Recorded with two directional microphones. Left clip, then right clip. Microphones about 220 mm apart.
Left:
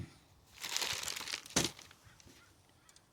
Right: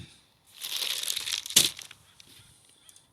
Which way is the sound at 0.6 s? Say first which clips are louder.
Right 5 dB; 40° left (ahead or behind).